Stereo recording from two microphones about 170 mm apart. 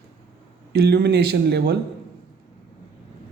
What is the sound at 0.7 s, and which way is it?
Speech, 65° right (ahead or behind).